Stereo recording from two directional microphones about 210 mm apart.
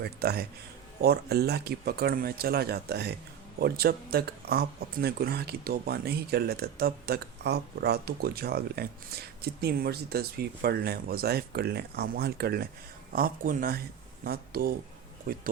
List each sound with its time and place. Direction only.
0.0 s speech: 50° right (ahead or behind)